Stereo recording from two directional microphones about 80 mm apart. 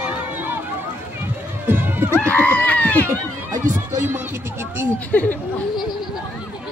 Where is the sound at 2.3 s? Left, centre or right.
Left.